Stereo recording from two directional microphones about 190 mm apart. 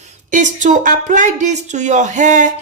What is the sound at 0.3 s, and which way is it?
A woman's voice, 40° right (ahead or behind).